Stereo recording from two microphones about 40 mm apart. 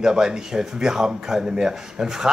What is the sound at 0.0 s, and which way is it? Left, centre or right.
Speech, centre.